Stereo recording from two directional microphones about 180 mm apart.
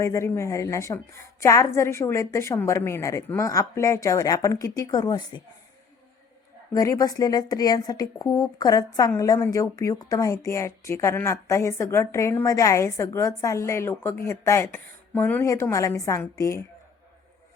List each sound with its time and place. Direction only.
0.0 s a woman's voice: 15° left (ahead or behind)
6.7 s a woman's voice: 20° left (ahead or behind)